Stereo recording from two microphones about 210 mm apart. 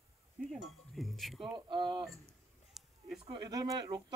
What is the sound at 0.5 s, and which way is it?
Chink, centre (ahead or behind).